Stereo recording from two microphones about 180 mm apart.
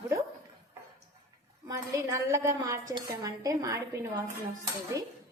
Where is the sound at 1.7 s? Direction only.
20° right (ahead or behind).